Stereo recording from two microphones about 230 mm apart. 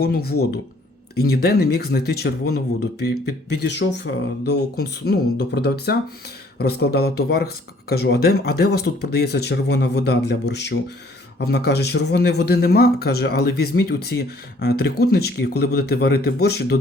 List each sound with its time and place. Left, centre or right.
0.0 s speech: left